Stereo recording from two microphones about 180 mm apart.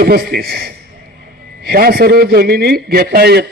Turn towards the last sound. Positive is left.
turn(degrees=-65)  # may be behind; listen again after turning